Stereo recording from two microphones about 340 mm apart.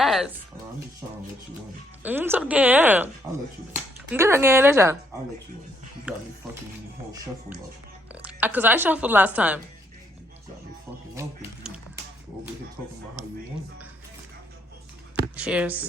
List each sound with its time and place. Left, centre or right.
0.0 s a sound: centre
2.0 s a woman's voice: centre
4.1 s a woman's voice: centre
6.1 s a woman's voice: centre
8.1 s a woman's voice: centre
11.1 s a sound: centre
15.4 s a woman's voice: centre